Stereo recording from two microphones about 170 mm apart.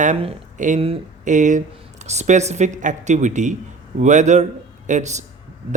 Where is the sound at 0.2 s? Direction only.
45° right (ahead or behind).